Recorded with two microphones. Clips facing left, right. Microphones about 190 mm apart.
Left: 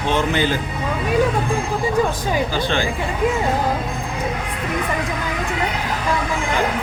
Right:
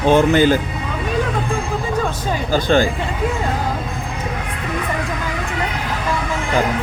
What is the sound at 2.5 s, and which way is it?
Speech, 45° right (ahead or behind).